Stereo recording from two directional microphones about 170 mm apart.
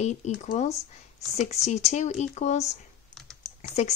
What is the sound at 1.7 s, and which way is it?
Speech, 40° left (ahead or behind).